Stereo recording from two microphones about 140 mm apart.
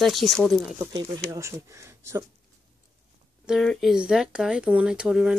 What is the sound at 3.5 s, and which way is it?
Speech, centre (ahead or behind).